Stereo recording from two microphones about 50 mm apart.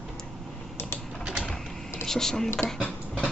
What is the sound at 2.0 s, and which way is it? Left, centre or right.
Speech, centre.